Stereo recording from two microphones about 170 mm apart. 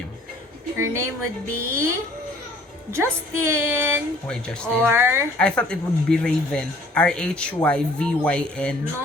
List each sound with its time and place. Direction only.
0.8 s a woman's voice: 15° right (ahead or behind)
2.9 s a woman's voice: 15° right (ahead or behind)
4.3 s speech: 5° left (ahead or behind)
4.9 s a woman's voice: 15° right (ahead or behind)
5.4 s speech: 5° left (ahead or behind)